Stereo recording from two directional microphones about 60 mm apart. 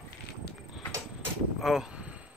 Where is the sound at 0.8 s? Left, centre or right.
Centre.